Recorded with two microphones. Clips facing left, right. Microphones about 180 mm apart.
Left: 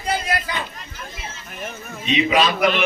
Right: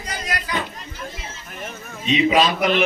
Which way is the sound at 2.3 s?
40° right (ahead or behind).